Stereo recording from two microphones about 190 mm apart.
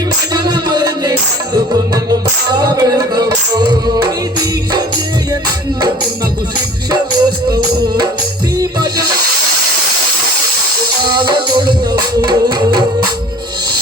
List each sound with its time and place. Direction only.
0.3 s music: 20° right (ahead or behind)
6.9 s music: 25° right (ahead or behind)
8.5 s music: 20° right (ahead or behind)
11.0 s music: 20° right (ahead or behind)